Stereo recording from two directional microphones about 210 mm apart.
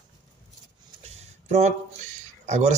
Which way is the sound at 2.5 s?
35° right (ahead or behind).